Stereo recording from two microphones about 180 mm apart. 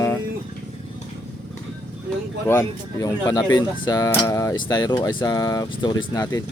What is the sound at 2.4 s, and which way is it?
Speech, 15° left (ahead or behind).